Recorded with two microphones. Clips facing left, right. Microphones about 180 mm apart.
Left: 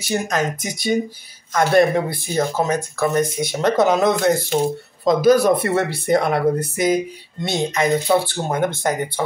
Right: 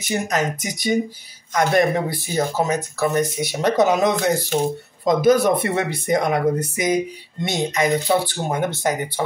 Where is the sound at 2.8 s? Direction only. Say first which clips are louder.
Left 1 dB; 15° left (ahead or behind).